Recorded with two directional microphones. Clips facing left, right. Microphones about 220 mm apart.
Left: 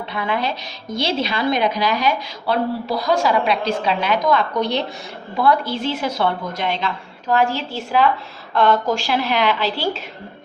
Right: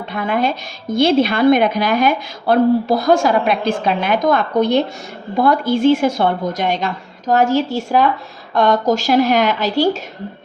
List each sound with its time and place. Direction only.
0.1 s a woman's voice: 50° right (ahead or behind)